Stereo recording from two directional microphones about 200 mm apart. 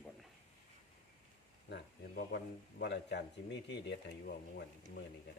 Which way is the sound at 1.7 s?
55° left (ahead or behind).